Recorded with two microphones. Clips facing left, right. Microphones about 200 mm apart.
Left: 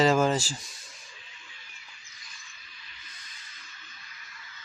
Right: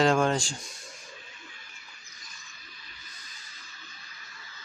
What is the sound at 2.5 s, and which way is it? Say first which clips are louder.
Music: right 2 dB; 40° right (ahead or behind).